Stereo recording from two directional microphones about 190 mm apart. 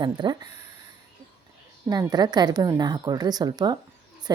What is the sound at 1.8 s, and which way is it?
A woman's voice, 20° right (ahead or behind).